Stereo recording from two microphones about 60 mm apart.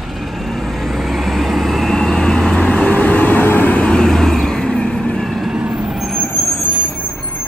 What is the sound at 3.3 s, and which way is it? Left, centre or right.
Vehicle, left.